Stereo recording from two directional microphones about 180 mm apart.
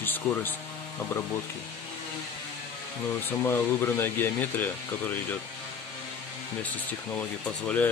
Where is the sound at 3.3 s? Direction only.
15° left (ahead or behind).